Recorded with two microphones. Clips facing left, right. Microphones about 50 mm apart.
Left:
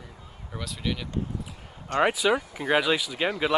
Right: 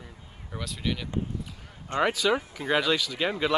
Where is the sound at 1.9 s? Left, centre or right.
Centre.